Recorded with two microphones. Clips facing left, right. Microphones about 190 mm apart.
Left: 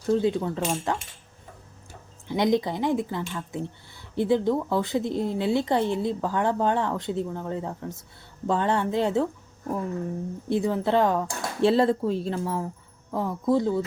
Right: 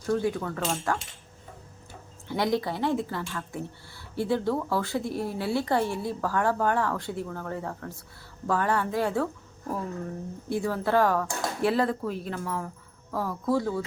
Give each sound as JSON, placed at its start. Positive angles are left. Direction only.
{"t": 0.1, "sound": "speech", "side_deg": 20}
{"t": 2.3, "sound": "speech", "side_deg": 20}